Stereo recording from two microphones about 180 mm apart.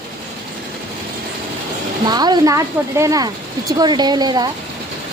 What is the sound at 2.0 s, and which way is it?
Speech, 25° right (ahead or behind).